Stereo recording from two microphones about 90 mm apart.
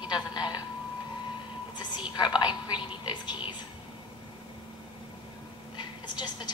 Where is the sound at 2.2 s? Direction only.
50° left (ahead or behind).